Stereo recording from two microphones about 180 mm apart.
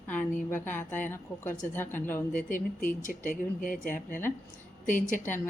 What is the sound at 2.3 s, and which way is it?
Speech, 45° left (ahead or behind).